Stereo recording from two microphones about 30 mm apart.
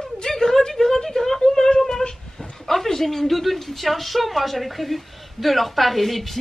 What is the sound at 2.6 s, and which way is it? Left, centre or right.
A woman's voice, centre.